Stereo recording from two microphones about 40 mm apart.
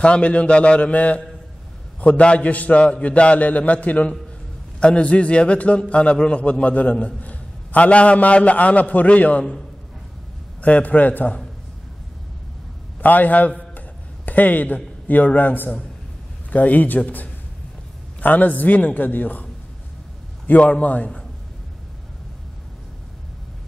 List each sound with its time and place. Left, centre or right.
0.0 s a man's voice: left
4.7 s a man's voice: left
10.6 s a man's voice: left
13.0 s a man's voice: left
18.2 s a man's voice: left